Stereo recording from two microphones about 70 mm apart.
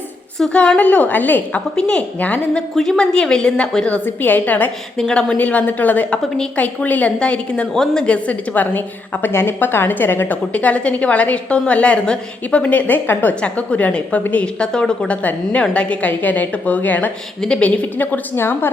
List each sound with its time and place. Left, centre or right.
0.5 s a woman's voice: centre
1.7 s a woman's voice: centre
2.6 s a woman's voice: centre
4.0 s a woman's voice: left
4.9 s a woman's voice: centre; by 10.3 s left
10.5 s a woman's voice: centre
17.4 s a woman's voice: centre
17.9 s a woman's voice: left